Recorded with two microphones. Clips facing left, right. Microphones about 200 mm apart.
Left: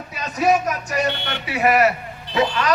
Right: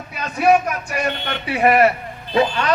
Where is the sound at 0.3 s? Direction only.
40° left (ahead or behind).